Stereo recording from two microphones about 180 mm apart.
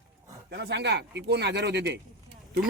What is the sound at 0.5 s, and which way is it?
Speech, 70° right (ahead or behind).